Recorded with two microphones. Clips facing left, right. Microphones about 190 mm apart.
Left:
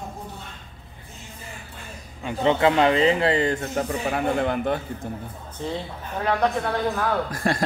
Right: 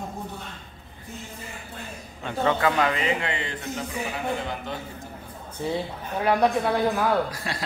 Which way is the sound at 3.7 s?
55° left (ahead or behind).